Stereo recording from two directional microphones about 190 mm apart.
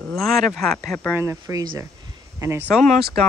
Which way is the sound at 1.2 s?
15° right (ahead or behind).